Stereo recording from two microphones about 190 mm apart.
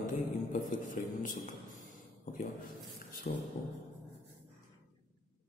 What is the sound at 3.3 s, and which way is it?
Speech, 45° left (ahead or behind).